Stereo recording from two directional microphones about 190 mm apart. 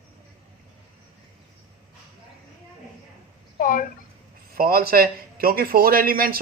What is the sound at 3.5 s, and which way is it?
Speech, 45° left (ahead or behind).